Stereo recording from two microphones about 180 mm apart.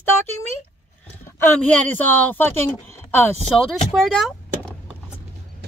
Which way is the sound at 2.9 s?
15° left (ahead or behind).